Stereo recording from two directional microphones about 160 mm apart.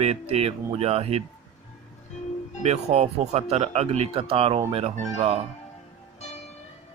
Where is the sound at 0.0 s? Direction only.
40° right (ahead or behind).